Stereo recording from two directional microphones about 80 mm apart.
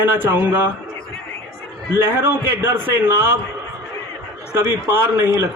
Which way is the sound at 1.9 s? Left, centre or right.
Right.